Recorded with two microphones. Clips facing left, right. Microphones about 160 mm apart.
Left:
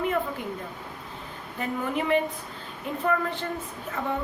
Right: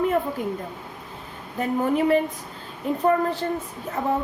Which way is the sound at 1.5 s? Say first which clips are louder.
Right 7 dB; 40° right (ahead or behind).